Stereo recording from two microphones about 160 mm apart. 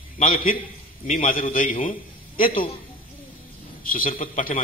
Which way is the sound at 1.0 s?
60° left (ahead or behind).